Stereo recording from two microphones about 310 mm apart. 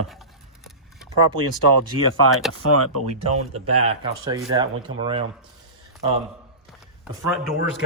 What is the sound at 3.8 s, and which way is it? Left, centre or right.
Speech, centre.